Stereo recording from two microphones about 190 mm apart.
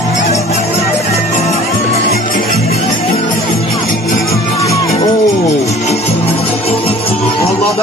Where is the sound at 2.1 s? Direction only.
50° left (ahead or behind).